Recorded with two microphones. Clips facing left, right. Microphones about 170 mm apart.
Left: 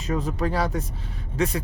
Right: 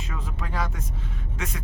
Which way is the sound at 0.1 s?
40° left (ahead or behind).